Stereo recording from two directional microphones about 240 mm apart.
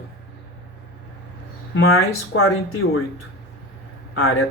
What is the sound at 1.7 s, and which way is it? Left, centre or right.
Speech, left.